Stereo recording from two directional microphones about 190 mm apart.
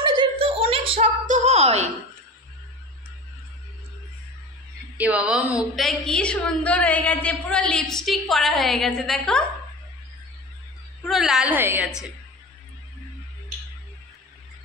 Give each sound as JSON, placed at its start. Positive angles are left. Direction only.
{"t": 0.2, "sound": "a sound", "side_deg": -30}
{"t": 4.9, "sound": "a woman's voice", "side_deg": -5}
{"t": 11.1, "sound": "a woman's voice", "side_deg": 0}